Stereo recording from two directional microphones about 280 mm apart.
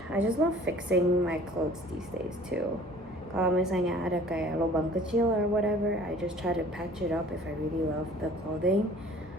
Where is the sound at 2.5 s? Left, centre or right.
Right.